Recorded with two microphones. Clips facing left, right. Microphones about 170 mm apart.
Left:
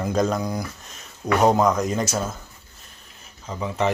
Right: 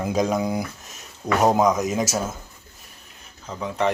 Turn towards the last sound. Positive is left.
turn(degrees=5)  # may be behind; listen again after turning